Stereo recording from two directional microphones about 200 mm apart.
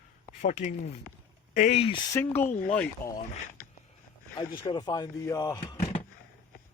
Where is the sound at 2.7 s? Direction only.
5° left (ahead or behind).